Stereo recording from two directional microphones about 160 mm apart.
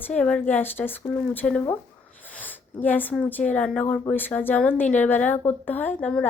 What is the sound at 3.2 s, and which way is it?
A woman's voice, 10° left (ahead or behind).